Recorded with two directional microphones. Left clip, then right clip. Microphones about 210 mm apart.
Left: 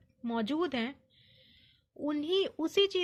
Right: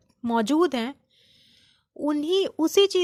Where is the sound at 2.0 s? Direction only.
45° right (ahead or behind).